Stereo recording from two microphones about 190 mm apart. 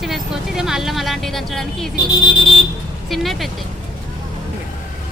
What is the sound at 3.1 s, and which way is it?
Speech, centre (ahead or behind).